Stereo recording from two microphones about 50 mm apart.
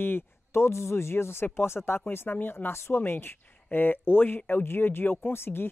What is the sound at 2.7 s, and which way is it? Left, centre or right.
Speech, left.